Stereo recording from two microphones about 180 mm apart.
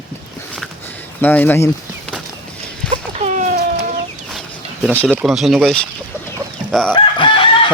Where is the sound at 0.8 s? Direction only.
10° left (ahead or behind).